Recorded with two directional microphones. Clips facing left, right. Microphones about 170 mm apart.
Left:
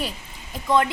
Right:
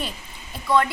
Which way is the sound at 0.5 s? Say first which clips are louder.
Even; 20° left (ahead or behind).